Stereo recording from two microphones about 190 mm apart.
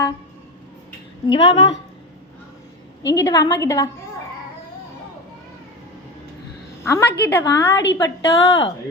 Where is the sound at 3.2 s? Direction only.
15° left (ahead or behind).